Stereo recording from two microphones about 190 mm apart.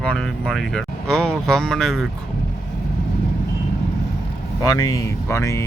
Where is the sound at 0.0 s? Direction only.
5° left (ahead or behind).